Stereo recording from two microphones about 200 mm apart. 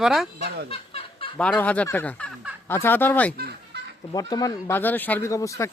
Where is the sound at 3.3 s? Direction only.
50° right (ahead or behind).